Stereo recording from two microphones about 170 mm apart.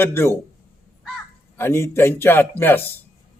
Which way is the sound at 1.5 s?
15° left (ahead or behind).